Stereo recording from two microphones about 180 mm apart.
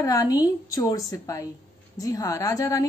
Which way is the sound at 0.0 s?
20° left (ahead or behind).